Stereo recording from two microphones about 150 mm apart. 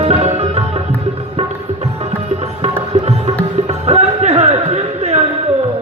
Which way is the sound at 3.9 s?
45° right (ahead or behind).